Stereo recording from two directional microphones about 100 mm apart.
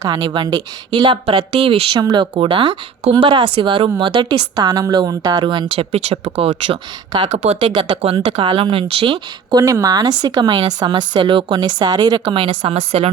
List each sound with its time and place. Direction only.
0.0 s speech: 45° right (ahead or behind); by 2.0 s 60° right (ahead or behind)
2.0 s speech: 50° right (ahead or behind); by 6.1 s 85° right
6.2 s speech: 65° right (ahead or behind)
7.3 s speech: 90° right
7.7 s speech: 55° right (ahead or behind)
8.2 s speech: 75° right (ahead or behind); by 9.6 s 50° right (ahead or behind)
9.6 s speech: 35° right (ahead or behind)
12.3 s speech: 60° right (ahead or behind); by 13.1 s 85° right